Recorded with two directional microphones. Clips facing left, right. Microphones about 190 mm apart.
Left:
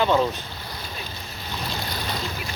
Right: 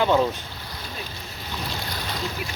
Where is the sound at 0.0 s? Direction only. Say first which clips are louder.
Even; 15° right (ahead or behind).